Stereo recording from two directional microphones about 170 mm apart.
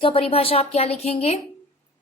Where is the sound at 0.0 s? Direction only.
35° left (ahead or behind).